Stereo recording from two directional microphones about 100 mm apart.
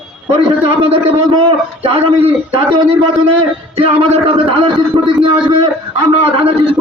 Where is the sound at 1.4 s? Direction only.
60° right (ahead or behind).